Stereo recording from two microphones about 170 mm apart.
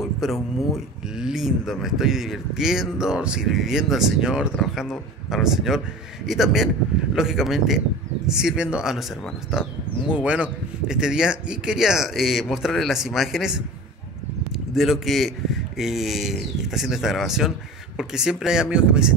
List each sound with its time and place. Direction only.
0.0 s speech: centre (ahead or behind)
14.8 s speech: centre (ahead or behind)